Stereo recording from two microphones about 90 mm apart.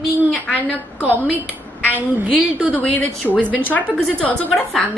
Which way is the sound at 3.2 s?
15° left (ahead or behind).